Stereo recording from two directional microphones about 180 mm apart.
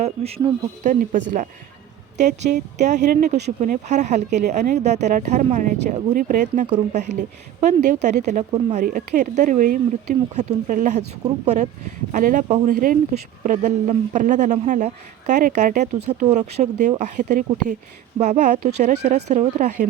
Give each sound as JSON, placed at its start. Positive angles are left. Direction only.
{"t": 0.0, "sound": "speech", "side_deg": -35}
{"t": 1.1, "sound": "a man's voice", "side_deg": -45}
{"t": 3.1, "sound": "speech", "side_deg": -60}
{"t": 3.6, "sound": "a man's voice", "side_deg": -40}